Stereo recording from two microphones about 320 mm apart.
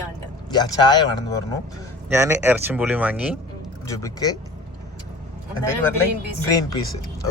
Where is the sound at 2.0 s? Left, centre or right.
Centre.